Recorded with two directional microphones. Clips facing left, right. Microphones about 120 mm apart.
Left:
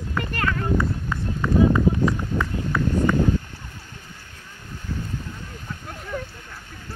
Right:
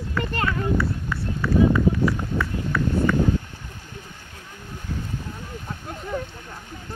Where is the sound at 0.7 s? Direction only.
20° left (ahead or behind).